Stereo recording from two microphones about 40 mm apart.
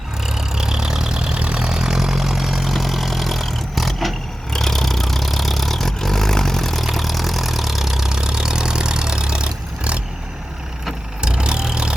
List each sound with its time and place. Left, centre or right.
0.3 s vehicle: centre
11.2 s vehicle: right